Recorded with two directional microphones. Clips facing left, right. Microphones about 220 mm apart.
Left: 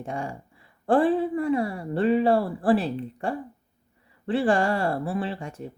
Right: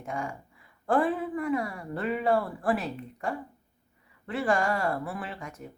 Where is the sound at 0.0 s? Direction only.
30° left (ahead or behind).